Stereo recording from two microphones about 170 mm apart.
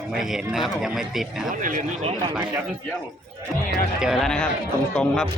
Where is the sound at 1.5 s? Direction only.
50° right (ahead or behind).